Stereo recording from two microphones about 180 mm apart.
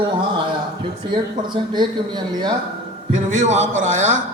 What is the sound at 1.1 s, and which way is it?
Speech, 25° right (ahead or behind).